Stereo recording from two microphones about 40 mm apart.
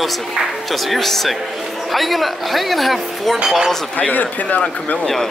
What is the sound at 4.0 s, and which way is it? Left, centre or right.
Speech, left.